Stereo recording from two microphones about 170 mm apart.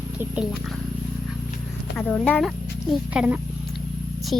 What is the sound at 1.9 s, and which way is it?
Speech, 10° left (ahead or behind).